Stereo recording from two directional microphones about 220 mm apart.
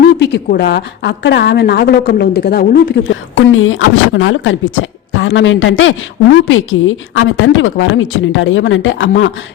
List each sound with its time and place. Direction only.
0.0 s a woman's voice: 50° left (ahead or behind)